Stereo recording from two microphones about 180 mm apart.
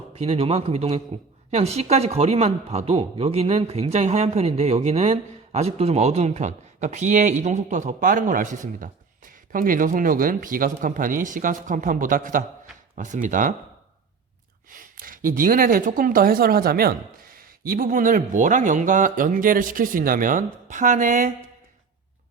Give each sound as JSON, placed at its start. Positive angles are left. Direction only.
{"t": 0.2, "sound": "speech", "side_deg": -35}
{"t": 14.7, "sound": "speech", "side_deg": -50}